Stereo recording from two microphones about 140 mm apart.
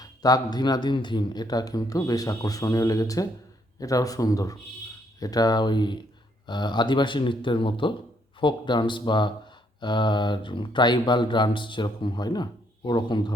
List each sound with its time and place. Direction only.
0.0 s speech: 25° left (ahead or behind)